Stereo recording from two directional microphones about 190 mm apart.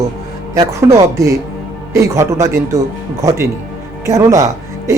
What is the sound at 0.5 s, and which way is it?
Speech, 15° right (ahead or behind).